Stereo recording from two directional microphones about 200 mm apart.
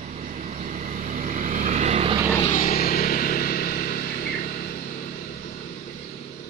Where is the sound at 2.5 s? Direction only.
45° left (ahead or behind).